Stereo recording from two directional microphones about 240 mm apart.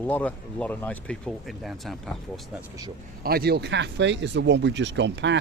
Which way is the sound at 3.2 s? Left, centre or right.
Right.